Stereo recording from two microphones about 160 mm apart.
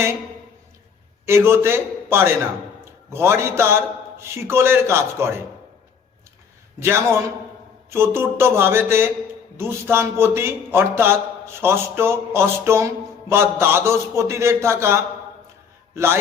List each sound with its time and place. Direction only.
1.2 s a man's voice: 15° right (ahead or behind)
6.8 s speech: 15° right (ahead or behind)